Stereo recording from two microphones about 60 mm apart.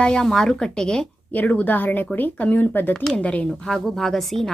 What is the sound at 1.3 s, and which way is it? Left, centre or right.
Speech, left.